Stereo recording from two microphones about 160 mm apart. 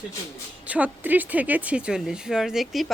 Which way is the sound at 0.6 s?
10° right (ahead or behind).